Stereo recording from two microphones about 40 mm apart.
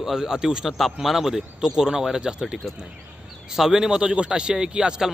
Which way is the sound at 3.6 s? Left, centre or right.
Centre.